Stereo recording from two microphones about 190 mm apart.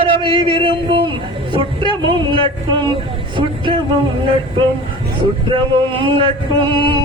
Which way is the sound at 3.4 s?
25° right (ahead or behind).